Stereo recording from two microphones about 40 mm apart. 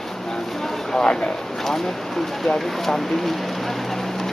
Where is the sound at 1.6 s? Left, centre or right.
Centre.